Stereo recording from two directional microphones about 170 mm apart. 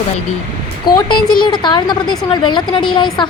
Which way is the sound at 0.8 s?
25° left (ahead or behind).